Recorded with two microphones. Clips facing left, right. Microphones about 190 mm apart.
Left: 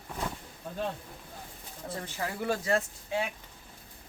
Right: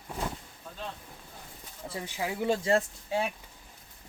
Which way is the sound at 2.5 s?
25° right (ahead or behind).